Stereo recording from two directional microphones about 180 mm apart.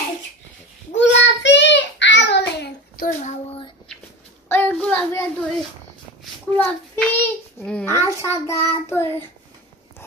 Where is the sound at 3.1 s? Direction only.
40° left (ahead or behind).